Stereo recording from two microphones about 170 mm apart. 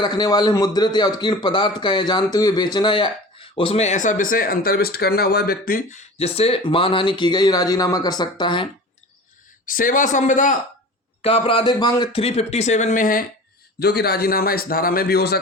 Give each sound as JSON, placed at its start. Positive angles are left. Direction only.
{"t": 0.0, "sound": "a man's voice", "side_deg": 25}
{"t": 9.6, "sound": "speech", "side_deg": 55}
{"t": 11.2, "sound": "speech", "side_deg": 35}
{"t": 13.7, "sound": "a man's voice", "side_deg": 70}